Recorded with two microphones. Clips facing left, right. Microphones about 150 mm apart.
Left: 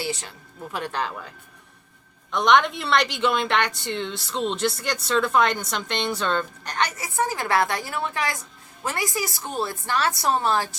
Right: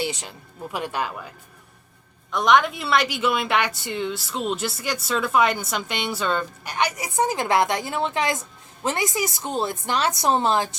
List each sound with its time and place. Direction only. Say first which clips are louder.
0.0 s speech: right 2 dB; 20° right (ahead or behind)
2.3 s a woman's voice: even; centre (ahead or behind); by 10.8 s 20° right (ahead or behind)